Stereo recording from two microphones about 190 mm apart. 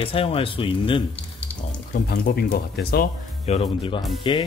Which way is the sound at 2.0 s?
60° left (ahead or behind).